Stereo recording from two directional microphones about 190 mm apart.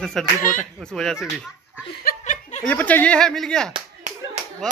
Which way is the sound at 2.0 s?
50° left (ahead or behind).